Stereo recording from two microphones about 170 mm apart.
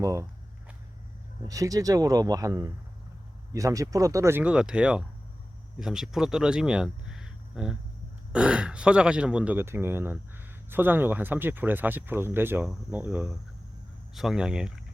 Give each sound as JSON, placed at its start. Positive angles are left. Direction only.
{"t": 0.0, "sound": "speech", "side_deg": -20}
{"t": 1.5, "sound": "speech", "side_deg": -20}